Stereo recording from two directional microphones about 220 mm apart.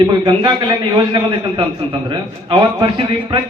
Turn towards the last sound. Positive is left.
turn(degrees=-20)  # may be behind; listen again after turning